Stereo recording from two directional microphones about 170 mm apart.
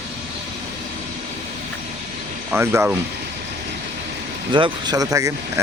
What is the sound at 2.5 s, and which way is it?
Speech, 10° right (ahead or behind).